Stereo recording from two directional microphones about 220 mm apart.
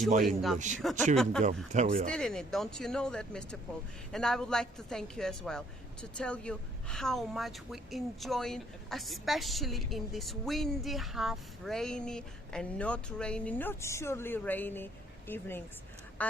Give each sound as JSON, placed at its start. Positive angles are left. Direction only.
{"t": 0.2, "sound": "speech", "side_deg": 0}
{"t": 1.7, "sound": "speech", "side_deg": -30}
{"t": 2.0, "sound": "speech", "side_deg": 5}